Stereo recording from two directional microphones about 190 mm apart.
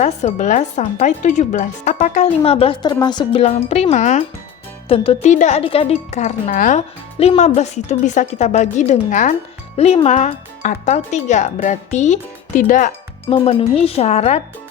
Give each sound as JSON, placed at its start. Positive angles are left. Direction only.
{"t": 0.0, "sound": "speech", "side_deg": 35}
{"t": 13.3, "sound": "speech", "side_deg": 30}